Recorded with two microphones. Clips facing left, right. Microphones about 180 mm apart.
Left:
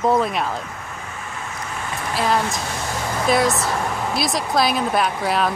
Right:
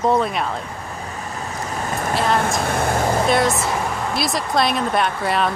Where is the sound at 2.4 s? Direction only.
55° right (ahead or behind).